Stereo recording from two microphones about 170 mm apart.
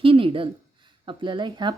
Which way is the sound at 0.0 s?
30° right (ahead or behind).